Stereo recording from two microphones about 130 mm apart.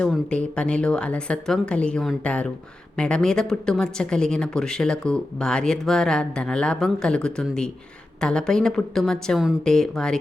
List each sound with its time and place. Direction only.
0.0 s speech: 10° left (ahead or behind)